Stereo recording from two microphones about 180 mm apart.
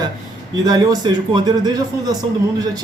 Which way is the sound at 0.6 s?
20° right (ahead or behind).